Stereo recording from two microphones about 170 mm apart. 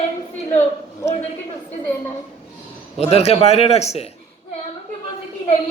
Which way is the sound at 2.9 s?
35° left (ahead or behind).